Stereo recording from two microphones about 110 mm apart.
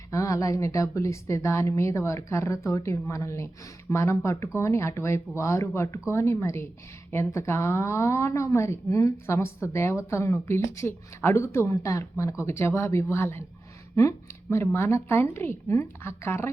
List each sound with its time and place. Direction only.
0.1 s a woman's voice: 30° left (ahead or behind)